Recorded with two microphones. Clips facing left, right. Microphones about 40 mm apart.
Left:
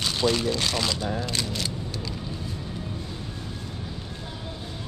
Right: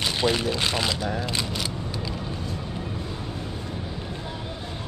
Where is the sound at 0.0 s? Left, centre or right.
Right.